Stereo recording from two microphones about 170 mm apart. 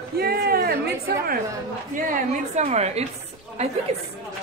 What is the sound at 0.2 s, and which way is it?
A woman's voice, 65° right (ahead or behind).